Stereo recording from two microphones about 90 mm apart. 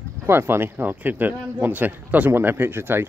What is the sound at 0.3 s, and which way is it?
Speech, 25° right (ahead or behind).